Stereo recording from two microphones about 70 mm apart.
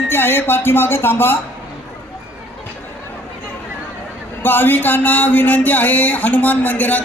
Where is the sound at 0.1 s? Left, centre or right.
Left.